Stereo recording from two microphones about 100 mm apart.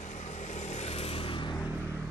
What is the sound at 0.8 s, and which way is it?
Vehicle, 90° left.